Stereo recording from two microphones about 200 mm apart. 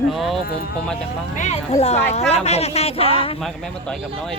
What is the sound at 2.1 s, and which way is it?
Speech, 30° left (ahead or behind).